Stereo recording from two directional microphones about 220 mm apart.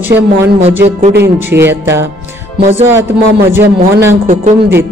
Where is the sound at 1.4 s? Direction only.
10° right (ahead or behind).